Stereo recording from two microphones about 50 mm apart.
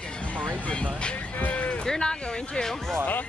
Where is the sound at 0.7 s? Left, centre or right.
Left.